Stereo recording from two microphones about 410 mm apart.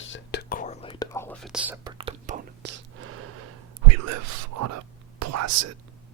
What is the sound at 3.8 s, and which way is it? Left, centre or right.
Speech, right.